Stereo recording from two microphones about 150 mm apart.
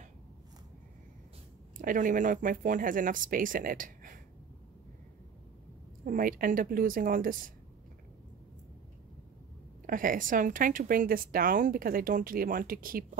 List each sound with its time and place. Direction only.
1.8 s speech: 60° right (ahead or behind)
6.0 s a woman's voice: 65° right (ahead or behind)
9.8 s a woman's voice: 65° right (ahead or behind)